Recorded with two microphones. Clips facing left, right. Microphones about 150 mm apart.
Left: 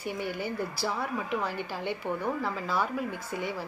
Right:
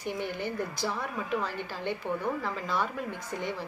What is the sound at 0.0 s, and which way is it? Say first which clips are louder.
A woman's voice: even; 10° left (ahead or behind).